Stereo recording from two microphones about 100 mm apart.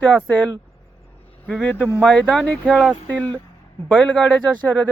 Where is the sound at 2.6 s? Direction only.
5° right (ahead or behind).